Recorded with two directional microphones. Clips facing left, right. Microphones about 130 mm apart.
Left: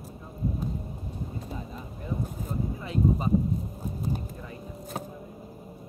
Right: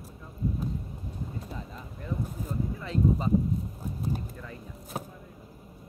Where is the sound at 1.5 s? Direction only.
20° left (ahead or behind).